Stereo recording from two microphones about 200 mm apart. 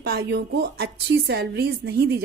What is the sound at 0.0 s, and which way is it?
A woman's voice, 50° right (ahead or behind).